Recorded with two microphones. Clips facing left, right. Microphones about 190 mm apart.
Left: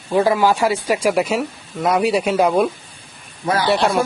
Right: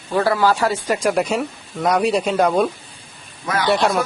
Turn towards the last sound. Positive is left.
turn(degrees=0)  # may be behind; listen again after turning